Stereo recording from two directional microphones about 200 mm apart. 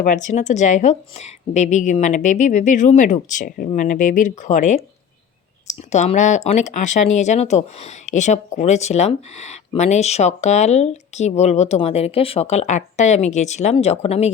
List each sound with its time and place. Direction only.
0.0 s speech: 40° left (ahead or behind)